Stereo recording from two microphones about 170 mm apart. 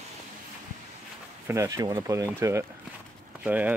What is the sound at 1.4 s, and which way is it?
Speech, 15° right (ahead or behind).